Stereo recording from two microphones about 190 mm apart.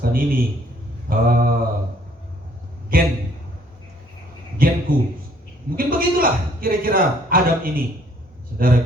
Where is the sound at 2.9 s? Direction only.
50° right (ahead or behind).